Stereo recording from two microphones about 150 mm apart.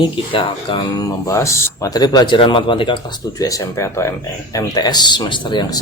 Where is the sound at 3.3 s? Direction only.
25° left (ahead or behind).